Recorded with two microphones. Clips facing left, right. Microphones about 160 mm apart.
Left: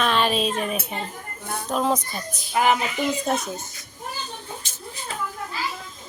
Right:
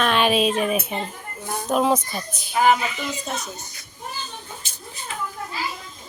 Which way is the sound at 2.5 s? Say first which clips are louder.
Right 2 dB; 60° left (ahead or behind).